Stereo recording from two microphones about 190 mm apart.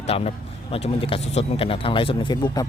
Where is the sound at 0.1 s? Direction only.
35° left (ahead or behind).